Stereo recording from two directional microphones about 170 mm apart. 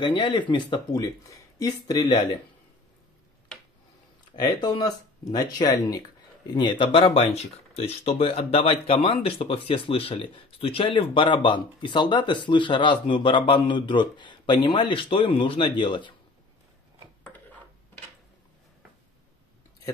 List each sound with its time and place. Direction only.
0.0 s speech: 30° left (ahead or behind)
4.4 s speech: 25° left (ahead or behind)